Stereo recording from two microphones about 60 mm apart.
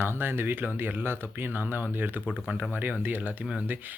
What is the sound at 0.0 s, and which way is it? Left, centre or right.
Speech, right.